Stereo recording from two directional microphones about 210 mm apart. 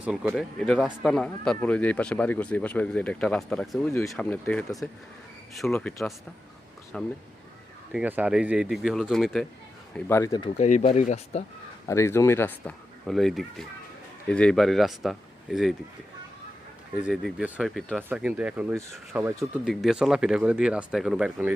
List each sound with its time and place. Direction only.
0.0 s speech: 5° right (ahead or behind)
7.9 s speech: 5° right (ahead or behind)
10.1 s speech: 15° left (ahead or behind)
10.6 s speech: 35° left (ahead or behind)
11.9 s speech: 15° left (ahead or behind)
17.0 s speech: centre (ahead or behind)